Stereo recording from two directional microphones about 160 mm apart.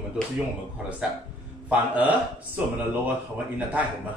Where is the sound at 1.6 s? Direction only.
10° right (ahead or behind).